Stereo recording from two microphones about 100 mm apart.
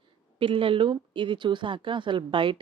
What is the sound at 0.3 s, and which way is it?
Speech, 60° right (ahead or behind).